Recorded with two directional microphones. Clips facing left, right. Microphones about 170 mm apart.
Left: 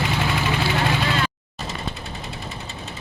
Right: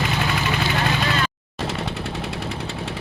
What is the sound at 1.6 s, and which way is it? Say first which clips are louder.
Jackhammer: right 5 dB; 90° right.